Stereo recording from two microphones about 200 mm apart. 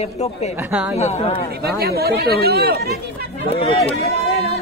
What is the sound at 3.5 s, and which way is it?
Speech, 30° left (ahead or behind).